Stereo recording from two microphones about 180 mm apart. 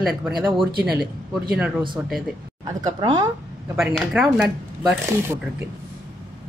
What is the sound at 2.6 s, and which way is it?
Speech, 20° right (ahead or behind).